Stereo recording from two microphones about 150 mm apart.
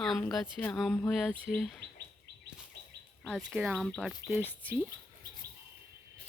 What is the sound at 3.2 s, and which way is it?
Speech, 5° left (ahead or behind).